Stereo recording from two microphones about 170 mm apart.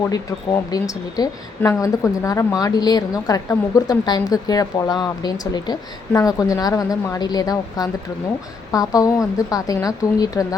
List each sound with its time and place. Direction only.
0.7 s a woman's voice: 20° left (ahead or behind)